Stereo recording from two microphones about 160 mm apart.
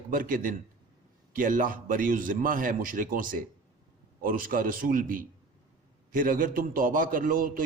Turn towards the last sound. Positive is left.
turn(degrees=-60)  # may be behind; listen again after turning